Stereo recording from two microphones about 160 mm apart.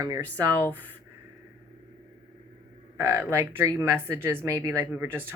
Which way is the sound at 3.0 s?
15° right (ahead or behind).